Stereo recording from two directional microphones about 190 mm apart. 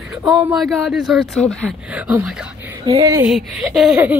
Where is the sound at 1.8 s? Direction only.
5° right (ahead or behind).